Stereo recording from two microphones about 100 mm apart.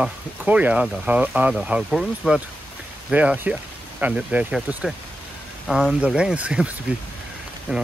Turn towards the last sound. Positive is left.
turn(degrees=-10)  # may be behind; listen again after turning